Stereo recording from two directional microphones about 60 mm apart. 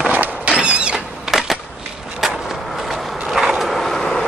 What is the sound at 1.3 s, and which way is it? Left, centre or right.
Skateboard, centre.